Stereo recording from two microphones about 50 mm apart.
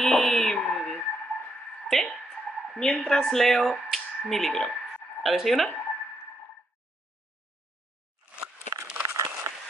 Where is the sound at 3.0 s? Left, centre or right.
Centre.